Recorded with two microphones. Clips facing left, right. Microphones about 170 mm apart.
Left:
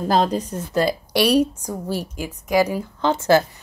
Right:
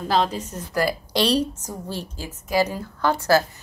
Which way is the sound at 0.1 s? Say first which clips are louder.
Left 3 dB; 40° left (ahead or behind).